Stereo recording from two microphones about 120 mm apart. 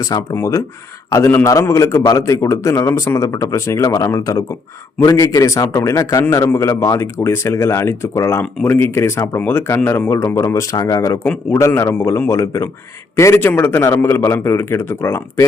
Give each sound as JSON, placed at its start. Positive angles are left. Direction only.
{"t": 0.0, "sound": "a man's voice", "side_deg": 25}